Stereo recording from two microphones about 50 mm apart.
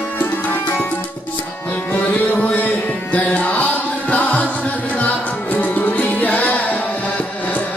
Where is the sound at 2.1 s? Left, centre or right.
Left.